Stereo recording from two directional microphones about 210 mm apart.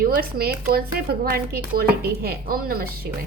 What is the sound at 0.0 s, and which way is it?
Speech, 45° right (ahead or behind).